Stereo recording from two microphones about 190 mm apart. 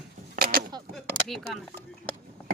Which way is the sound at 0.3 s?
55° right (ahead or behind).